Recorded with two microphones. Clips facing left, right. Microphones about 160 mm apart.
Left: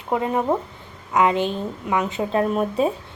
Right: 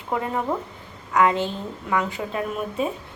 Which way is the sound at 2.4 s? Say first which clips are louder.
Left 5 dB; 35° left (ahead or behind).